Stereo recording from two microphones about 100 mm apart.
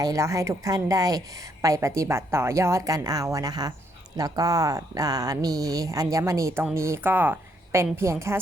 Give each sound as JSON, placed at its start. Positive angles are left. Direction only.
{"t": 0.0, "sound": "a woman's voice", "side_deg": -35}